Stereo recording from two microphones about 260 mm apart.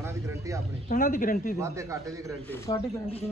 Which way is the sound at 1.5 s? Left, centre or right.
Centre.